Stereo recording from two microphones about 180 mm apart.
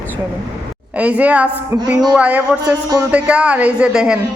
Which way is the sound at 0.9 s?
10° right (ahead or behind).